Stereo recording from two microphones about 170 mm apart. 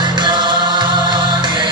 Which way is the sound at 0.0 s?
25° right (ahead or behind).